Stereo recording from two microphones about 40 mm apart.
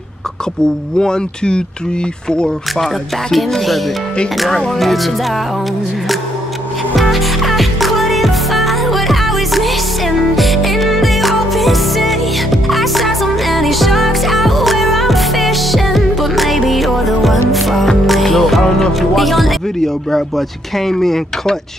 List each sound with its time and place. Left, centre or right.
0.9 s speech: left
2.8 s music: centre
7.0 s music: centre
20.1 s speech: centre